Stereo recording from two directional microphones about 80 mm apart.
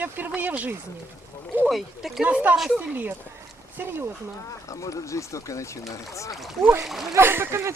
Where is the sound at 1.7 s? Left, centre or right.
Centre.